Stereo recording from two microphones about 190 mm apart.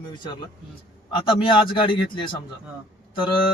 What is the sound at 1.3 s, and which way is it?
Speech, 25° left (ahead or behind).